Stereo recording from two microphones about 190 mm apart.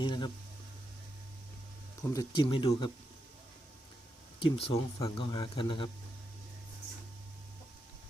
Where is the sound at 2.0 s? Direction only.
20° left (ahead or behind).